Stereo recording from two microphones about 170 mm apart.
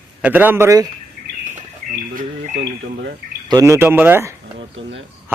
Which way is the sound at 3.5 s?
15° right (ahead or behind).